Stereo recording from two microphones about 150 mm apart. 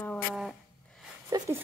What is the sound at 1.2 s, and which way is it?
Speech, 20° right (ahead or behind).